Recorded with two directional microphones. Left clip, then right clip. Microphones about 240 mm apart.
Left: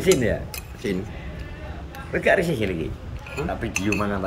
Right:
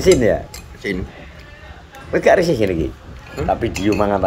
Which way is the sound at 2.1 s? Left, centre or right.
Centre.